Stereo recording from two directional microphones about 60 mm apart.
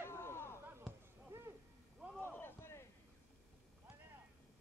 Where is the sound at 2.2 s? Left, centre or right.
Left.